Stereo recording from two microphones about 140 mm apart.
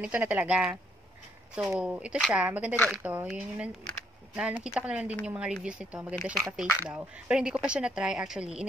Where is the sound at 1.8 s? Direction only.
10° right (ahead or behind).